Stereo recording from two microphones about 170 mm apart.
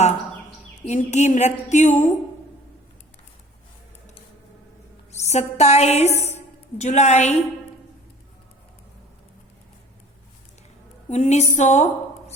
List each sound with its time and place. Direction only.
0.8 s a woman's voice: 45° left (ahead or behind)
5.1 s a woman's voice: 40° left (ahead or behind)
11.1 s a woman's voice: 40° left (ahead or behind)